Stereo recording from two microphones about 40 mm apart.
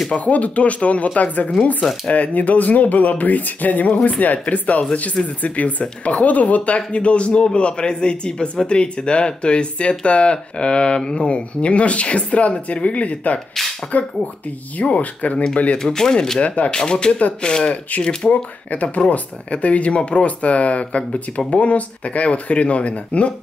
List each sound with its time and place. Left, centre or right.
0.1 s speech: left
15.3 s speech: left
15.8 s speech: centre
16.4 s speech: left
16.7 s speech: centre
18.3 s speech: left